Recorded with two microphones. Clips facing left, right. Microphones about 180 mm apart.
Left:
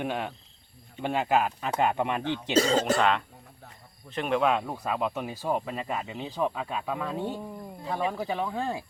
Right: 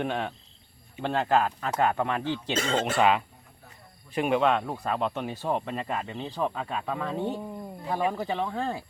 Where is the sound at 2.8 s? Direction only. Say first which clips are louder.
Right 1 dB; 5° right (ahead or behind).